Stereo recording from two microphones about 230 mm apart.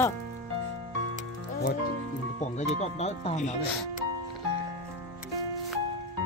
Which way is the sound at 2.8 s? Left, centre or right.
Left.